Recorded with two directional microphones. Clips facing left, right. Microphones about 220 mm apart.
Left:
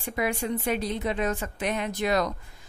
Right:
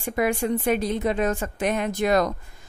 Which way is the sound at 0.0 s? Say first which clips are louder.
Right 5 dB; 50° right (ahead or behind).